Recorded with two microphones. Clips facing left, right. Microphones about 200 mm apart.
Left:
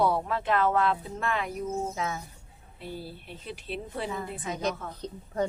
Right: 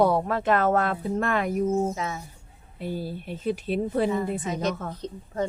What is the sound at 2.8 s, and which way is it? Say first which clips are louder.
Speech: right 8 dB; 45° right (ahead or behind).